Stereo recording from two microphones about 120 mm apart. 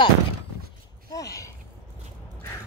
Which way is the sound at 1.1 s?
30° left (ahead or behind).